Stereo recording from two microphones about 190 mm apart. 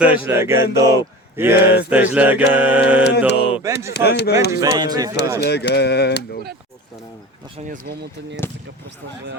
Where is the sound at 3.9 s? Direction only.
60° left (ahead or behind).